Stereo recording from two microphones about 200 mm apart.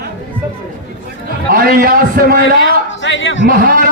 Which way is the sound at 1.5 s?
45° right (ahead or behind).